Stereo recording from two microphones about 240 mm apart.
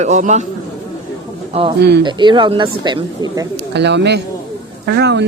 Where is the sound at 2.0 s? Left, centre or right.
Centre.